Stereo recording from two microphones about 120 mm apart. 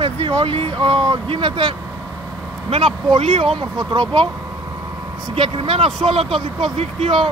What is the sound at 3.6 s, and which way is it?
Speech, 35° right (ahead or behind).